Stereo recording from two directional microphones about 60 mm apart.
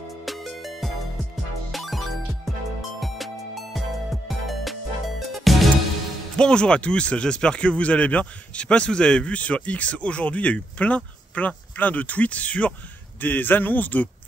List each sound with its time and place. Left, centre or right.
0.2 s music: centre
6.3 s speech: centre
13.2 s speech: left